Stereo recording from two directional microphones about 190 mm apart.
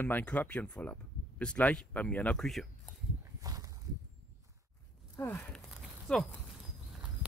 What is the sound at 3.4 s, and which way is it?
Walk, 20° right (ahead or behind).